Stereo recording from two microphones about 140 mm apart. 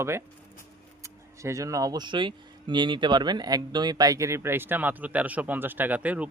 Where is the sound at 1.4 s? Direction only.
20° right (ahead or behind).